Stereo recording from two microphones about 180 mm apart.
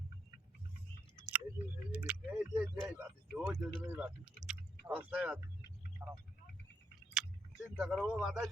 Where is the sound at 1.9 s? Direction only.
5° right (ahead or behind).